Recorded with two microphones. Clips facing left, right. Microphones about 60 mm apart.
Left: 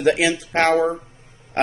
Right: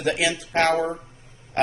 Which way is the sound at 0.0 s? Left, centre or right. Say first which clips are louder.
Left 5 dB; left.